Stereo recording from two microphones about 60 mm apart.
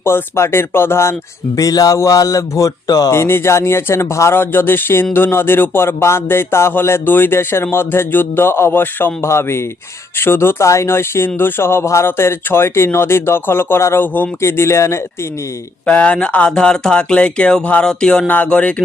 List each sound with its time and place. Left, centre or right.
0.0 s speech: left
1.5 s speech: left
3.1 s speech: left
4.4 s a sound: left
9.2 s speech: left
10.2 s a sound: left
10.7 s speech: left
12.0 s a sound: left
14.4 s speech: left
15.9 s speech: centre